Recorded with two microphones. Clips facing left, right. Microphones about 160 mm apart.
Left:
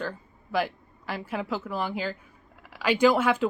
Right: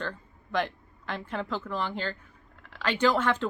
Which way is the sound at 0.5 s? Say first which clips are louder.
Left 2 dB; 5° left (ahead or behind).